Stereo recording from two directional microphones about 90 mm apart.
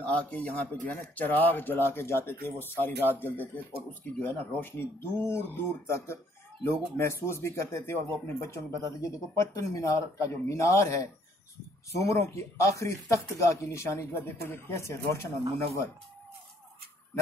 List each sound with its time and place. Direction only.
0.0 s speech: 15° left (ahead or behind)